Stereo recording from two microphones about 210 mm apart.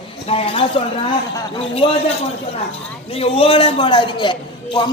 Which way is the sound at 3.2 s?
25° left (ahead or behind).